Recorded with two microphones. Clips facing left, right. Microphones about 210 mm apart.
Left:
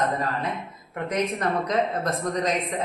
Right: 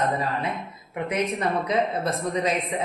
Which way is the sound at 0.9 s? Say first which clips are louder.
Even; 10° right (ahead or behind).